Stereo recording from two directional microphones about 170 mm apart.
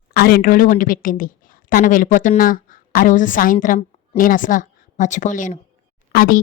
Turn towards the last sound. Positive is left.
turn(degrees=60)  # may be behind; listen again after turning